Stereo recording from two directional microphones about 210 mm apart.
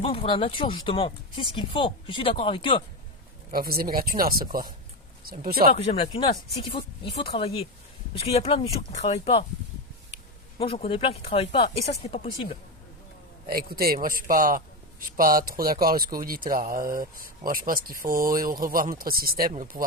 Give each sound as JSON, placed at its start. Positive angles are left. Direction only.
{"t": 0.0, "sound": "speech", "side_deg": 25}
{"t": 3.5, "sound": "speech", "side_deg": -45}
{"t": 5.7, "sound": "speech", "side_deg": 30}
{"t": 10.6, "sound": "speech", "side_deg": 25}
{"t": 13.5, "sound": "speech", "side_deg": -45}